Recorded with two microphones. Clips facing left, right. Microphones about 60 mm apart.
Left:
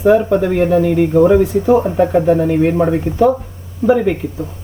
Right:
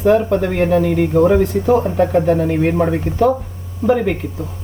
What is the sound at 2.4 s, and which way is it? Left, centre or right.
Speech, centre.